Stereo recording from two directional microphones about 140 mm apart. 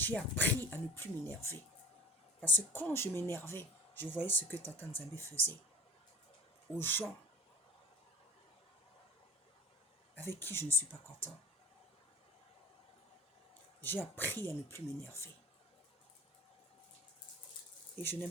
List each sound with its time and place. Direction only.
0.0 s speech: 15° left (ahead or behind)
6.7 s speech: 15° left (ahead or behind)
10.2 s speech: 15° left (ahead or behind)
13.8 s speech: 15° left (ahead or behind)
18.0 s speech: 15° left (ahead or behind)